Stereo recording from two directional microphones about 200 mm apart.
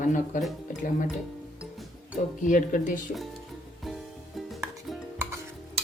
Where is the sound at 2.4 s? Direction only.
40° left (ahead or behind).